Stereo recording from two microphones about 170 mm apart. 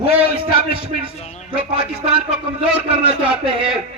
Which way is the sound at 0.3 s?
35° right (ahead or behind).